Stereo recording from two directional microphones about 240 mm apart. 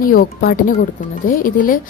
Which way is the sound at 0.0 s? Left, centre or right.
Left.